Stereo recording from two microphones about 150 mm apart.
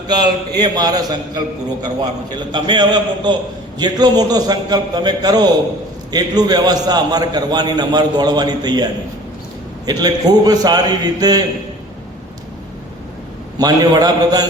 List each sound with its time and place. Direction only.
0.1 s a man's voice: 30° right (ahead or behind)
13.6 s a man's voice: 25° right (ahead or behind)